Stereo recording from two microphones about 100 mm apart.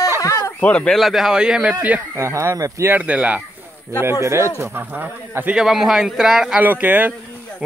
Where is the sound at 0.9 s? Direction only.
Centre (ahead or behind).